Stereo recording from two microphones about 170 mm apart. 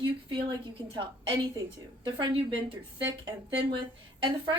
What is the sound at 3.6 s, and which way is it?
A woman's voice, 30° right (ahead or behind).